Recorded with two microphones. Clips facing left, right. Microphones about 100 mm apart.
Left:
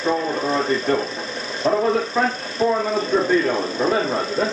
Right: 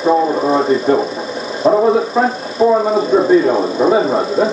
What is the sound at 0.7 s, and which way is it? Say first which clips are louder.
Speech: right 7 dB; 15° right (ahead or behind).